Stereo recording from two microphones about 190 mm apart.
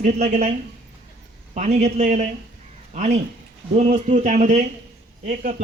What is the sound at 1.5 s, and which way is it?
Speech, 35° right (ahead or behind).